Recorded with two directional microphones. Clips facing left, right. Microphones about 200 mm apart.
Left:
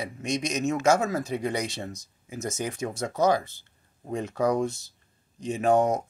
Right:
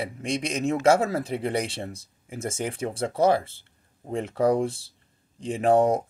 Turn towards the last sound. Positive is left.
turn(degrees=-30)  # may be behind; listen again after turning